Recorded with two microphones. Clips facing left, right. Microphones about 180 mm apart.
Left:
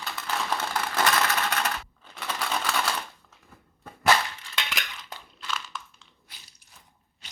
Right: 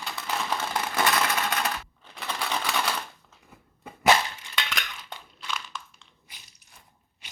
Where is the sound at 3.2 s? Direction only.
15° right (ahead or behind).